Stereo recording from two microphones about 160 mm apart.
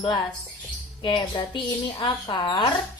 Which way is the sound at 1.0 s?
30° left (ahead or behind).